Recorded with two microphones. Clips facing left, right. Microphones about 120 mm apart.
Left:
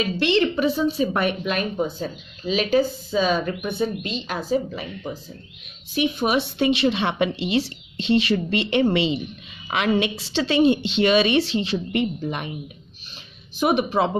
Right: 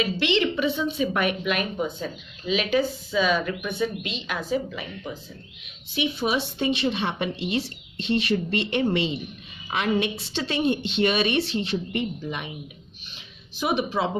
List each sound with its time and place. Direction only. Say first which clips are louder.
0.2 s a woman's voice: left 5 dB; 40° left (ahead or behind)
5.9 s a woman's voice: left 4 dB; 55° left (ahead or behind); by 12.1 s 85° left
13.6 s speech: left 5 dB; 55° left (ahead or behind)